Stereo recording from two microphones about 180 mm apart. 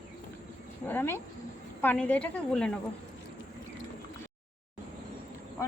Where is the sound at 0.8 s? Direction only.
10° left (ahead or behind).